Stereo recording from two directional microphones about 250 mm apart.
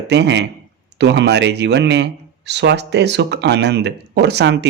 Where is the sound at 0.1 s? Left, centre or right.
Right.